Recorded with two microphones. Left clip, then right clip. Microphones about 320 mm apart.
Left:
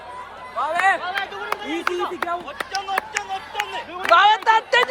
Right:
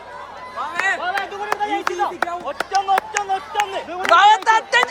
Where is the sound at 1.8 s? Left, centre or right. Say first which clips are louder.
Right 2 dB; right.